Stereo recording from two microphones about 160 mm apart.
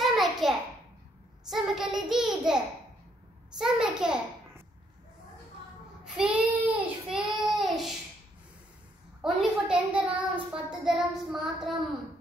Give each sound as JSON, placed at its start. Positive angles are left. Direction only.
{"t": 0.0, "sound": "a sound", "side_deg": 0}
{"t": 1.5, "sound": "a child's voice", "side_deg": 0}
{"t": 6.1, "sound": "child singing", "side_deg": -5}
{"t": 9.2, "sound": "a child's voice", "side_deg": -5}